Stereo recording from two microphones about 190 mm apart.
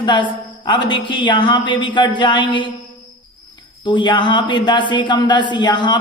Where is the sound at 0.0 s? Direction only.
25° left (ahead or behind).